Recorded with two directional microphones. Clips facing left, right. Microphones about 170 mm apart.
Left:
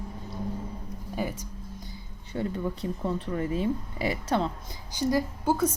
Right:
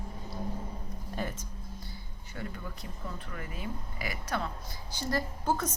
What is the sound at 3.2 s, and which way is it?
A woman's voice, 30° left (ahead or behind).